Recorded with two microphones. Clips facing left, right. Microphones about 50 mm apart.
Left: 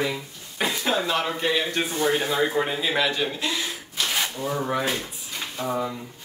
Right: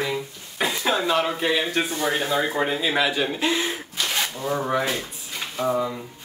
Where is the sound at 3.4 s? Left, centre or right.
Right.